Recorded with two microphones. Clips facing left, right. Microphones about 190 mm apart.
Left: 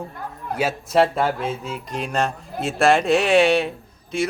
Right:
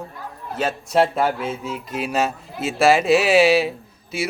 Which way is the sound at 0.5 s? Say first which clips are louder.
Even; 5° left (ahead or behind).